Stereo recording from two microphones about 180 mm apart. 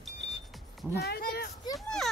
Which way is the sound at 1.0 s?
60° left (ahead or behind).